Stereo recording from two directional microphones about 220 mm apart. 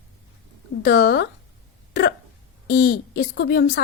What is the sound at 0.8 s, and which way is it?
Speech, 50° left (ahead or behind).